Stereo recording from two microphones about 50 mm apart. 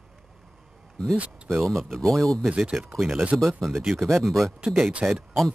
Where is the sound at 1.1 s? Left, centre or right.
Right.